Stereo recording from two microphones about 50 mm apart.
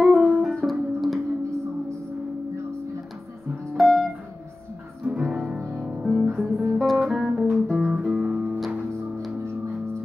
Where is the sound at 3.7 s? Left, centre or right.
Centre.